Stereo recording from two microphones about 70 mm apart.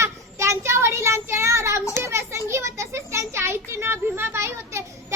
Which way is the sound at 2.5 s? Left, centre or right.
Right.